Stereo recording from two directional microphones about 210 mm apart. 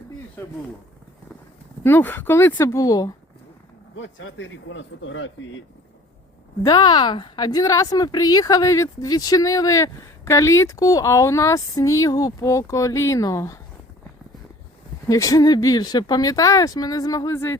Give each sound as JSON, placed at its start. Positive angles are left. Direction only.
{"t": 0.4, "sound": "a woman's voice", "side_deg": 10}
{"t": 1.8, "sound": "a woman's voice", "side_deg": 10}
{"t": 3.9, "sound": "speech", "side_deg": 65}
{"t": 6.6, "sound": "a woman's voice", "side_deg": 20}
{"t": 15.1, "sound": "a woman's voice", "side_deg": 15}